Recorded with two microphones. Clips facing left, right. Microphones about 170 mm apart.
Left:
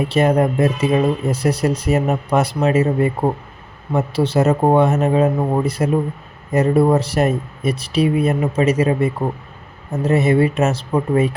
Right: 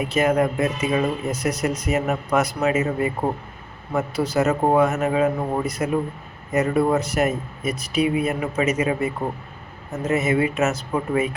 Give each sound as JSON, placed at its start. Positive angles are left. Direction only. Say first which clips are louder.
{"t": 0.0, "sound": "speech", "louder": "left 4 dB", "side_deg": 30}